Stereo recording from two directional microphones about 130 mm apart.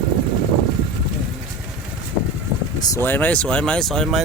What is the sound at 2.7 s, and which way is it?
Speech, 30° left (ahead or behind).